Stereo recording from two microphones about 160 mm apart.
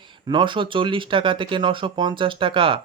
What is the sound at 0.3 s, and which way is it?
Speech, 30° right (ahead or behind).